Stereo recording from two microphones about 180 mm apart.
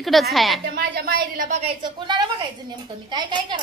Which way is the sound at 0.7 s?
60° right (ahead or behind).